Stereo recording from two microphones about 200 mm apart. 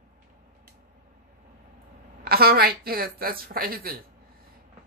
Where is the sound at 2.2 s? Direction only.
50° right (ahead or behind).